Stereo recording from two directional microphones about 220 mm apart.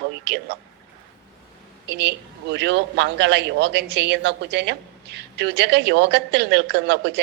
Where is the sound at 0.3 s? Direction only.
50° right (ahead or behind).